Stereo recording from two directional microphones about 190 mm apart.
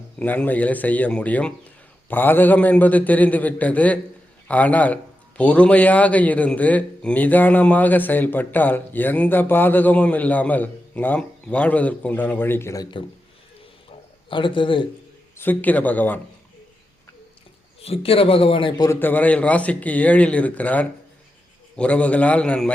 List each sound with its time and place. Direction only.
0.2 s a man's voice: 10° left (ahead or behind); by 13.1 s 25° left (ahead or behind)
14.3 s speech: 25° left (ahead or behind)
15.4 s a man's voice: 10° left (ahead or behind)
17.8 s speech: 30° left (ahead or behind)
18.9 s a man's voice: 10° left (ahead or behind)